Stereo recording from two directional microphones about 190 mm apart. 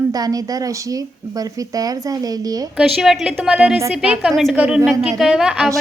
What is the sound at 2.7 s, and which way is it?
A woman's voice, centre (ahead or behind).